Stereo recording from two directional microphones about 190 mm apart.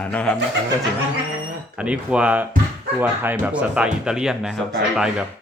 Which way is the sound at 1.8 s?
5° right (ahead or behind).